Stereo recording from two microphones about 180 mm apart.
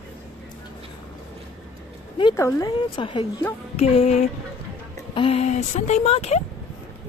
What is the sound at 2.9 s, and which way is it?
A woman's voice, 30° left (ahead or behind).